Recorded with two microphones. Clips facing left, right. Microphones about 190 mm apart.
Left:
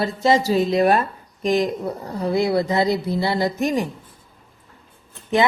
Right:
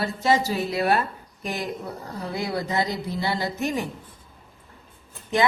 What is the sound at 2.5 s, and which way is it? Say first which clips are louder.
Speech: left 6 dB; 30° left (ahead or behind).